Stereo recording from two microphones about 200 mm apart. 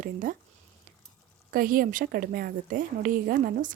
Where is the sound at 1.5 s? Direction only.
45° right (ahead or behind).